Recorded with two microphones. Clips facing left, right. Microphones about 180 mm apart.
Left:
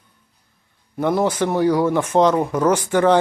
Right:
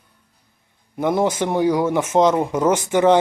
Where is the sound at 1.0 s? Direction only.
20° right (ahead or behind).